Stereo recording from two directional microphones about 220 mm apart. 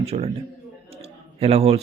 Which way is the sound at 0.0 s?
25° right (ahead or behind).